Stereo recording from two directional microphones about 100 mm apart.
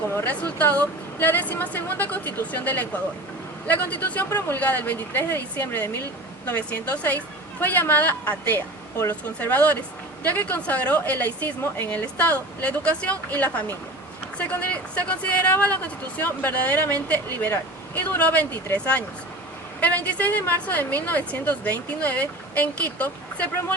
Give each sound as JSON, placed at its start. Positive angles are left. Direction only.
{"t": 0.1, "sound": "a woman's voice", "side_deg": 20}
{"t": 20.1, "sound": "a woman's voice", "side_deg": 15}